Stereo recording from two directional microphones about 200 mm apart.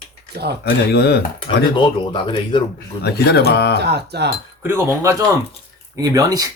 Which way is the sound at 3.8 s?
55° right (ahead or behind).